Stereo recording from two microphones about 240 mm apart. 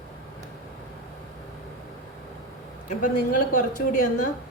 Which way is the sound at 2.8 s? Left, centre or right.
Left.